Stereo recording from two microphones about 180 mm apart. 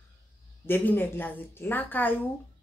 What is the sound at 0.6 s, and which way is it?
Speech, 10° left (ahead or behind).